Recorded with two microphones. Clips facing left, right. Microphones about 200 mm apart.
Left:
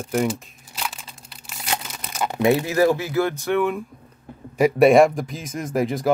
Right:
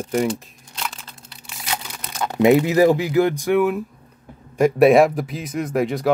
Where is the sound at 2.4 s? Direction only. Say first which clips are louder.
Right 4 dB; 20° right (ahead or behind).